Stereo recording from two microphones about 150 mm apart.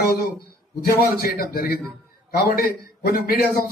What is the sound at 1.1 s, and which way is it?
A man's voice, 90° left.